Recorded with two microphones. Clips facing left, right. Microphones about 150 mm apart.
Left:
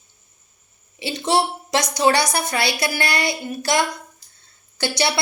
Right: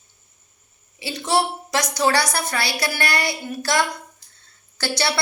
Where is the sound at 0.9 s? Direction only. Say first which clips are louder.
Left 1 dB; 25° left (ahead or behind).